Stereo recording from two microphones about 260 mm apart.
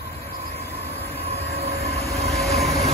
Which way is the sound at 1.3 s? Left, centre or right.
Right.